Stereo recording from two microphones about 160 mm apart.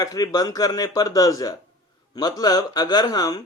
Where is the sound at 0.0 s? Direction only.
25° left (ahead or behind).